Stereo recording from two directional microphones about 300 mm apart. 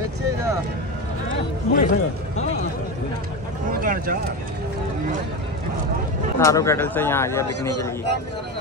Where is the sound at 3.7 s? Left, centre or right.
Right.